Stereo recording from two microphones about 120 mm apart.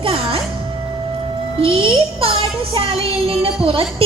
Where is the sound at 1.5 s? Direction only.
50° right (ahead or behind).